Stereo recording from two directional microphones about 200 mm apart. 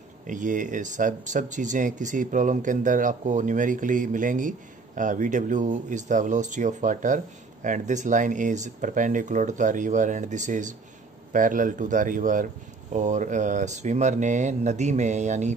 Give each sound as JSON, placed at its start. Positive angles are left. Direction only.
{"t": 0.3, "sound": "speech", "side_deg": -40}